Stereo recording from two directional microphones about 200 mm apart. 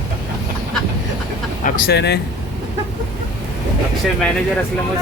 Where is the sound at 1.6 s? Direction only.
55° left (ahead or behind).